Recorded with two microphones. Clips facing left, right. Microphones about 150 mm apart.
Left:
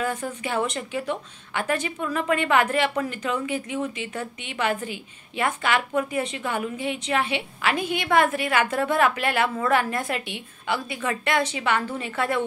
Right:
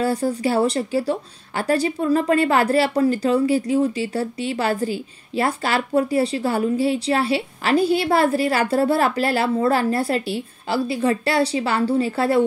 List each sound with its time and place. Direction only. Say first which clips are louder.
0.0 s speech: right 8 dB; 35° right (ahead or behind)